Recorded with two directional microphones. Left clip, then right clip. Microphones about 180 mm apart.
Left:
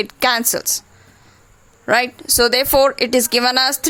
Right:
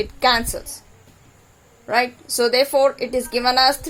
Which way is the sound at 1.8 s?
35° left (ahead or behind).